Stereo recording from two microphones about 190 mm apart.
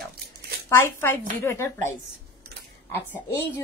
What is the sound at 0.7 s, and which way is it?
A child's voice, 10° left (ahead or behind).